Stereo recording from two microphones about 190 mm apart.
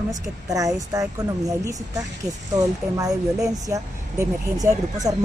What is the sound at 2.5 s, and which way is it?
Speech, 15° right (ahead or behind).